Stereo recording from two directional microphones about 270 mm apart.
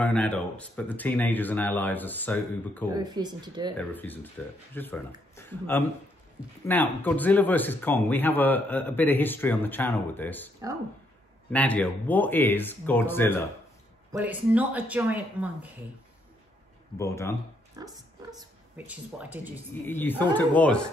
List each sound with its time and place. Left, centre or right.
0.0 s speech: centre
2.9 s speech: centre
3.7 s speech: centre
11.5 s speech: centre
14.1 s speech: centre
17.0 s speech: centre
17.8 s speech: centre
19.9 s speech: centre